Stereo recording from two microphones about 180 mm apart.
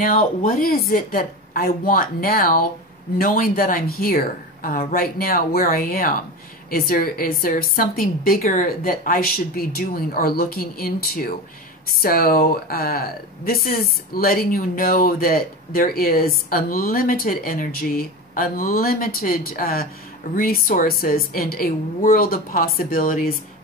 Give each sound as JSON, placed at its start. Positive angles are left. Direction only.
{"t": 0.4, "sound": "a woman's voice", "side_deg": 55}